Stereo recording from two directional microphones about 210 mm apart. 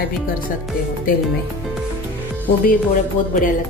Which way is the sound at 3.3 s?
40° left (ahead or behind).